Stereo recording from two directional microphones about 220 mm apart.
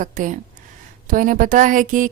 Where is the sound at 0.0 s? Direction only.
35° right (ahead or behind).